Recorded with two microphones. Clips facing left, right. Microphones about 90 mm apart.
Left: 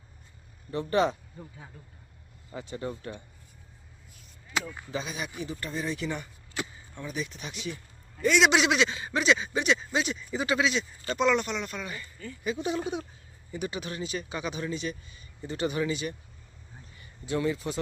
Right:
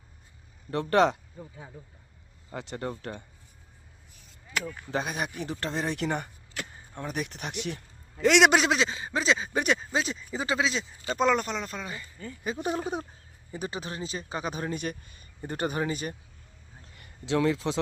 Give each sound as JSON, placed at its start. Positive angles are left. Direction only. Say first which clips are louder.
{"t": 0.7, "sound": "speech", "louder": "right 3 dB", "side_deg": -70}
{"t": 1.4, "sound": "speech", "louder": "right 2 dB", "side_deg": -5}
{"t": 2.5, "sound": "speech", "louder": "right 1 dB", "side_deg": -70}
{"t": 4.9, "sound": "speech", "louder": "right 4 dB", "side_deg": -60}
{"t": 5.4, "sound": "speech", "louder": "right 3 dB", "side_deg": -80}
{"t": 8.2, "sound": "a man's voice", "louder": "right 3 dB", "side_deg": -85}
{"t": 8.4, "sound": "speech", "louder": "right 1 dB", "side_deg": -40}
{"t": 9.5, "sound": "speech", "louder": "even", "side_deg": -45}
{"t": 12.5, "sound": "speech", "louder": "right 2 dB", "side_deg": -40}
{"t": 17.0, "sound": "a man's voice", "louder": "right 3 dB", "side_deg": -90}